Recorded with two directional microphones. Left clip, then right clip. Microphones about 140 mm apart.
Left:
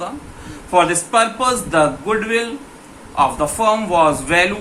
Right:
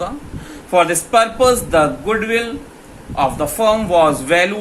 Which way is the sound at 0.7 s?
30° right (ahead or behind).